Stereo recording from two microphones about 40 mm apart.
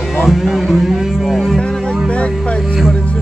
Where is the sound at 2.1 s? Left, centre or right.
Left.